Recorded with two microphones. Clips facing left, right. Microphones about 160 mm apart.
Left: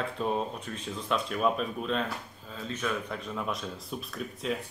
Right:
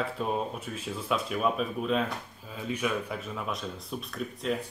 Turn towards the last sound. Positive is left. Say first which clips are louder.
# right 2 dB
turn(degrees=0)  # may be behind; listen again after turning